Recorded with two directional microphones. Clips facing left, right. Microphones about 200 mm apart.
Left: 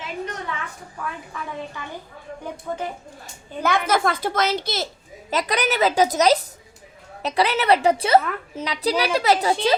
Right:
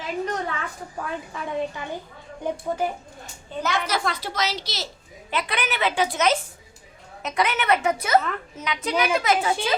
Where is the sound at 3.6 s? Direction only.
55° left (ahead or behind).